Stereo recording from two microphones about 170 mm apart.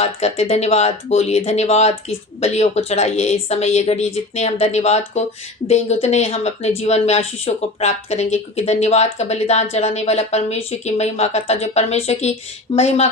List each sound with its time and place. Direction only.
0.0 s a woman's voice: 40° left (ahead or behind)